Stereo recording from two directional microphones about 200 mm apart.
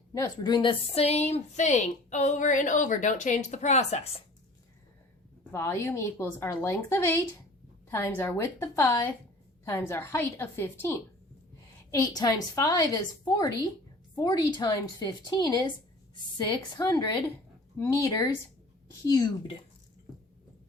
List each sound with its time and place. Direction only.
0.1 s a woman's voice: 20° left (ahead or behind)
5.5 s a woman's voice: 10° left (ahead or behind)